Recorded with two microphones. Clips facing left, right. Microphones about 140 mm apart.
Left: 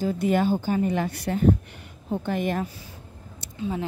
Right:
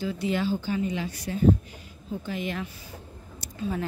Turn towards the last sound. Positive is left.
turn(degrees=20)  # may be behind; listen again after turning